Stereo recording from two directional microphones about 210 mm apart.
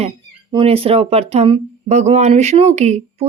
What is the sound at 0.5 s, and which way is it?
Speech, 25° right (ahead or behind).